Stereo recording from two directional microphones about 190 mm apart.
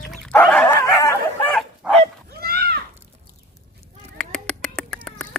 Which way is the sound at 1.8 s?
5° right (ahead or behind).